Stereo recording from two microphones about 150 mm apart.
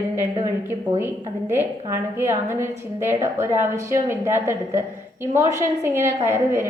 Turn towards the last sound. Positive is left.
turn(degrees=-15)  # may be behind; listen again after turning